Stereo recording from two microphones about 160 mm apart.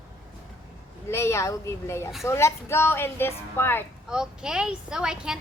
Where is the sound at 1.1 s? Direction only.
15° left (ahead or behind).